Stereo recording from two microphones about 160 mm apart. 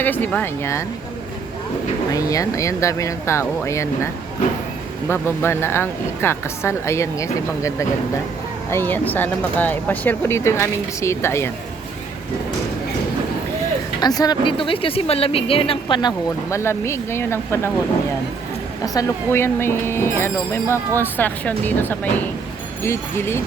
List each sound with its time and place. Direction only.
0.0 s speech: 10° left (ahead or behind)
2.1 s a woman's voice: 20° left (ahead or behind)
14.0 s a woman's voice: 25° left (ahead or behind)
18.9 s speech: 15° left (ahead or behind)